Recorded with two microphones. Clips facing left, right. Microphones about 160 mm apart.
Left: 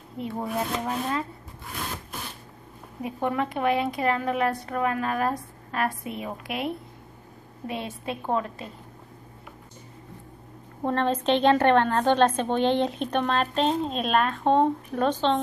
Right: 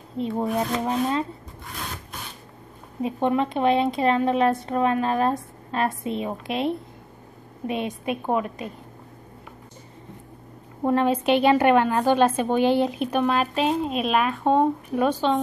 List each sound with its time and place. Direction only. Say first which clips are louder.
0.2 s a woman's voice: right 5 dB; 20° right (ahead or behind)
3.0 s a woman's voice: right 5 dB; 25° right (ahead or behind)
10.8 s a woman's voice: right 4 dB; 10° right (ahead or behind)